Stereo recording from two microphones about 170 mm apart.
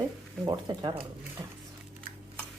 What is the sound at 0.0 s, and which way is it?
Speech, 20° right (ahead or behind).